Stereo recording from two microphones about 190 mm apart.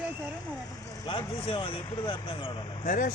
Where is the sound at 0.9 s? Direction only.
20° left (ahead or behind).